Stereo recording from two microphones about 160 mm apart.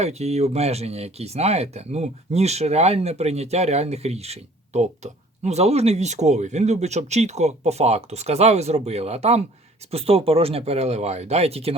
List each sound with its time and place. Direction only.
0.0 s speech: 40° right (ahead or behind)